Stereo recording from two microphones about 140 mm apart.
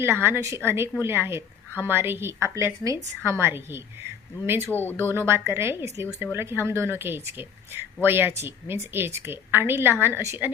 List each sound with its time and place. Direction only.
0.0 s a woman's voice: 15° right (ahead or behind)
4.7 s speech: 15° left (ahead or behind)
4.9 s a woman's voice: 15° right (ahead or behind)